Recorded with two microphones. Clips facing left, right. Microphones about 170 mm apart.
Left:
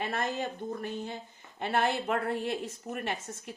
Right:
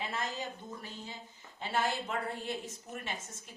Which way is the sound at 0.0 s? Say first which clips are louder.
Left 6 dB; 55° left (ahead or behind).